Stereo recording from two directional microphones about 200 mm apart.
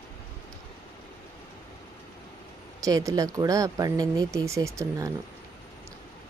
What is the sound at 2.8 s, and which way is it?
A woman's voice, 15° right (ahead or behind).